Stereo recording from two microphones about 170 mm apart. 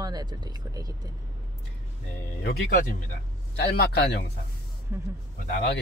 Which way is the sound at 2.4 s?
65° left (ahead or behind).